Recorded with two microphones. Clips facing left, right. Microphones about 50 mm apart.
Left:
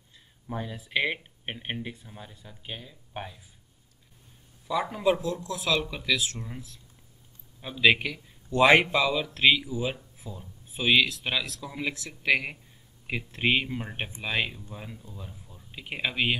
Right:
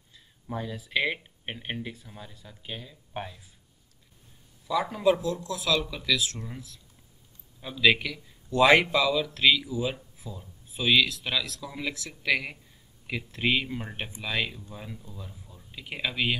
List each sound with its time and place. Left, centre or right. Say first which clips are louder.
0.5 s speech: right 1 dB; centre
4.8 s speech: right 2 dB; centre
5.2 s speech: even; left
6.3 s speech: even; centre
7.7 s speech: left 1 dB; centre
10.1 s a sound: even; centre
10.4 s speech: left 1 dB; centre
14.7 s speech: even; centre
15.7 s speech: left 1 dB; centre